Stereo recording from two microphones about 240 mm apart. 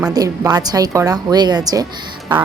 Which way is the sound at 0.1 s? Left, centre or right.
Centre.